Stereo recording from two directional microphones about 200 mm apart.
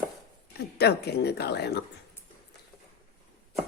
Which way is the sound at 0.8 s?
55° left (ahead or behind).